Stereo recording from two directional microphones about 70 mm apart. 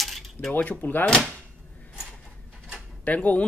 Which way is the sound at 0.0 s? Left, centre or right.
Centre.